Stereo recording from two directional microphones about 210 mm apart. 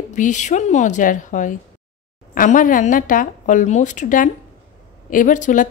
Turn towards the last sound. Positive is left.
turn(degrees=35)  # may be behind; listen again after turning